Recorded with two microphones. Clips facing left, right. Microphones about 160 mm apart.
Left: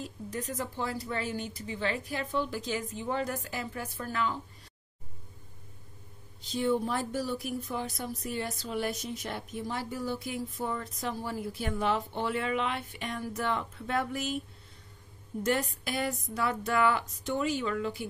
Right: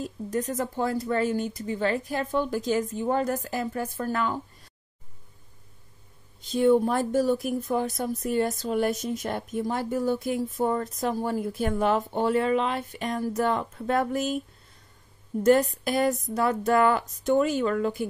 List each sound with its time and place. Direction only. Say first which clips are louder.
0.0 s speech: right 8 dB; 45° right (ahead or behind)
6.5 s speech: right 8 dB; 50° right (ahead or behind)
15.4 s speech: right 10 dB; 45° right (ahead or behind)